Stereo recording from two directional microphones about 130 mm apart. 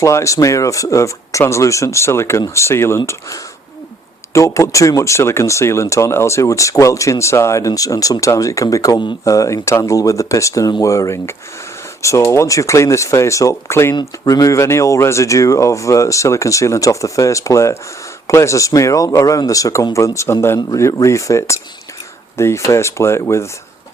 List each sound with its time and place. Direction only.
0.0 s speech: 20° left (ahead or behind)